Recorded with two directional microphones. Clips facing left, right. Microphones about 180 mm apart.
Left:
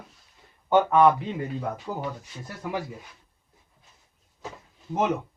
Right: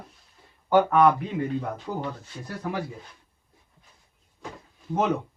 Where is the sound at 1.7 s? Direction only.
10° left (ahead or behind).